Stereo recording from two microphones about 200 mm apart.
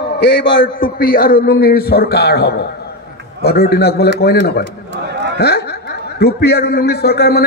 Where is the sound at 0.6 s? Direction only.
45° left (ahead or behind).